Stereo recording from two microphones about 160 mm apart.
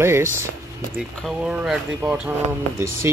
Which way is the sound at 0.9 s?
5° right (ahead or behind).